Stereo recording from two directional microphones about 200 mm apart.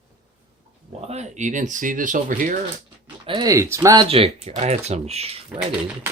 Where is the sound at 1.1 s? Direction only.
35° right (ahead or behind).